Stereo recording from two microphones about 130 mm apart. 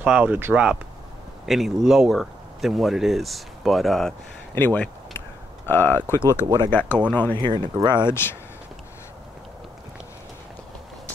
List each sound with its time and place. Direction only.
0.0 s speech: 10° right (ahead or behind)
1.4 s speech: centre (ahead or behind)
4.6 s speech: 15° left (ahead or behind)
6.4 s speech: 30° right (ahead or behind)
6.7 s speech: 15° left (ahead or behind)
7.3 s speech: 35° right (ahead or behind)
8.1 s speech: 15° left (ahead or behind)